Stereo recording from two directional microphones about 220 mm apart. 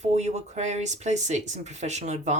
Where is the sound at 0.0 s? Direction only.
30° right (ahead or behind).